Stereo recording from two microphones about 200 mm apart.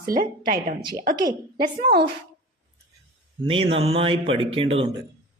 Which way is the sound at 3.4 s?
30° right (ahead or behind).